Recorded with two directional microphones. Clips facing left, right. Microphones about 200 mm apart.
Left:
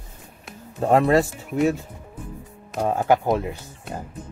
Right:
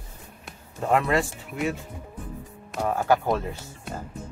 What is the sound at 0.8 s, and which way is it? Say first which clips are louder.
Speech: left 5 dB; 35° left (ahead or behind).